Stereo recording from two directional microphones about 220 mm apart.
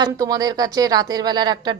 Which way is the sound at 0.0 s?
15° right (ahead or behind).